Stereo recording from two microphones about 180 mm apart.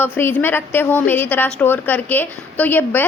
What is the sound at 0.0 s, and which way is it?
A woman's voice, 10° left (ahead or behind).